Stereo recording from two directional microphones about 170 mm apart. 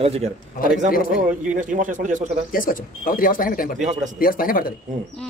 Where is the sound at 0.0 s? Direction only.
35° right (ahead or behind).